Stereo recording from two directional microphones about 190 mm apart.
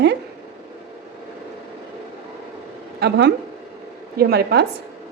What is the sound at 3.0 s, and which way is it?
A woman's voice, 60° right (ahead or behind).